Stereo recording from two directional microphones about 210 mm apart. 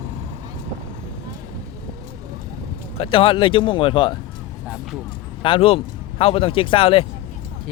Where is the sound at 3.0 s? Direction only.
25° left (ahead or behind).